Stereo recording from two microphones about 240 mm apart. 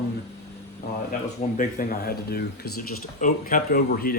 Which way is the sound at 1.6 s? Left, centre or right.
Left.